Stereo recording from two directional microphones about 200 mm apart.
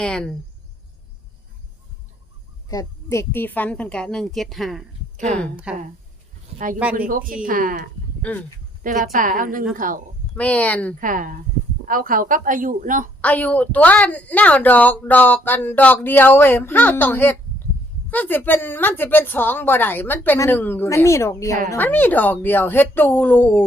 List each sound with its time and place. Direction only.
0.0 s a woman's voice: 5° left (ahead or behind)
2.6 s a woman's voice: 15° left (ahead or behind); by 5.8 s 5° right (ahead or behind)
7.1 s a woman's voice: 45° right (ahead or behind)
10.3 s a woman's voice: 5° left (ahead or behind)
11.0 s a woman's voice: 40° right (ahead or behind)
13.2 s a woman's voice: 5° left (ahead or behind)